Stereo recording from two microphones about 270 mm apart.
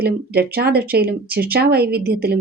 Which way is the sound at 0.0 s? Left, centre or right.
Right.